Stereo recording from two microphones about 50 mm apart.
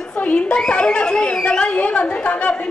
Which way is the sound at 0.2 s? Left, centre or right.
Left.